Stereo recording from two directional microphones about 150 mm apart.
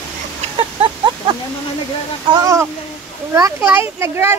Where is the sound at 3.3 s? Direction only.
20° right (ahead or behind).